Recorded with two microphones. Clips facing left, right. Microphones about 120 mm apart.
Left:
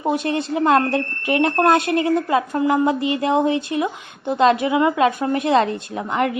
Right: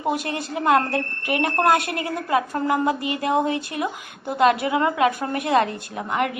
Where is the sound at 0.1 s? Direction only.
25° left (ahead or behind).